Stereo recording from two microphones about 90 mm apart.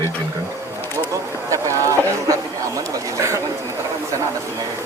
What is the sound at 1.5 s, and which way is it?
Boat, 35° right (ahead or behind).